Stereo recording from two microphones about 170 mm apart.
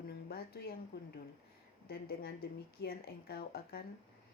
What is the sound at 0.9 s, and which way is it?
A woman's voice, 70° left (ahead or behind).